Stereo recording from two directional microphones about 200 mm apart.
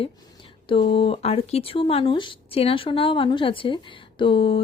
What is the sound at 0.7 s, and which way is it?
Speech, 25° left (ahead or behind).